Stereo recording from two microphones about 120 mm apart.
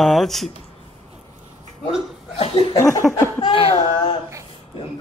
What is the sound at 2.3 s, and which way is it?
Speech, 45° left (ahead or behind).